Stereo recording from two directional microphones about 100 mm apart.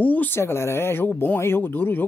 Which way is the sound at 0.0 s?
15° left (ahead or behind).